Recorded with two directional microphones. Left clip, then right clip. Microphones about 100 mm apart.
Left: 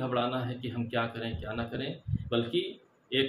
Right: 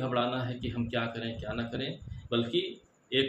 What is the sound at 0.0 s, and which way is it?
A man's voice, 10° left (ahead or behind).